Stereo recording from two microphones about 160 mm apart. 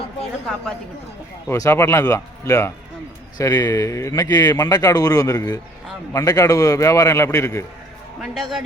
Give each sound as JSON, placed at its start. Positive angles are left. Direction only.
{"t": 1.5, "sound": "a man's voice", "side_deg": 20}
{"t": 8.2, "sound": "a man's voice", "side_deg": 0}